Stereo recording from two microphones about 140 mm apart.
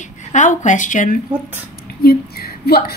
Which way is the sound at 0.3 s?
60° left (ahead or behind).